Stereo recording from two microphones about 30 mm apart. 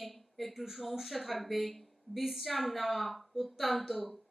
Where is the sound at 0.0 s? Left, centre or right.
Centre.